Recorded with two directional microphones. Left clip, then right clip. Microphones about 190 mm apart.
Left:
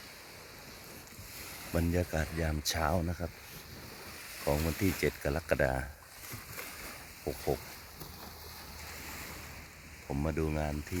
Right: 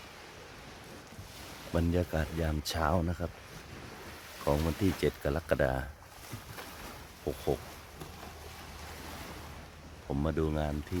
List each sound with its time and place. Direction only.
1.7 s speech: centre (ahead or behind)
4.4 s speech: centre (ahead or behind)
7.3 s speech: 5° left (ahead or behind)
10.1 s speech: centre (ahead or behind)